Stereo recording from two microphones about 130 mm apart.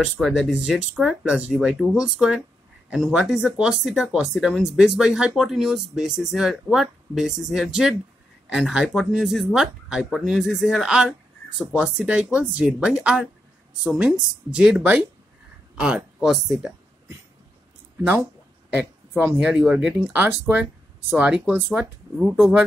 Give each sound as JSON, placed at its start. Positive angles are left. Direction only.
{"t": 0.0, "sound": "speech", "side_deg": 0}
{"t": 18.8, "sound": "speech", "side_deg": -15}
{"t": 22.2, "sound": "speech", "side_deg": 0}